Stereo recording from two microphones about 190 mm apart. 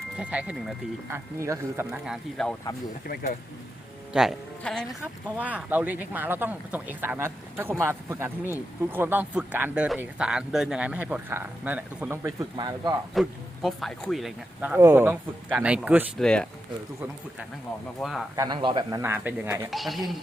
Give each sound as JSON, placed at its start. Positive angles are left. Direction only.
{"t": 0.2, "sound": "speech", "side_deg": -5}
{"t": 4.1, "sound": "speech", "side_deg": 0}
{"t": 5.4, "sound": "speech", "side_deg": -10}
{"t": 13.1, "sound": "speech", "side_deg": 0}
{"t": 16.2, "sound": "speech", "side_deg": 5}
{"t": 18.0, "sound": "speech", "side_deg": 0}
{"t": 18.3, "sound": "speech", "side_deg": -25}
{"t": 19.7, "sound": "speech", "side_deg": 0}